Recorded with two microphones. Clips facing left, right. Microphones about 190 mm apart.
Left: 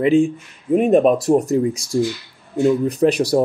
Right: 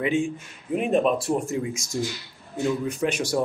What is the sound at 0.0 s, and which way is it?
Speech, 35° left (ahead or behind).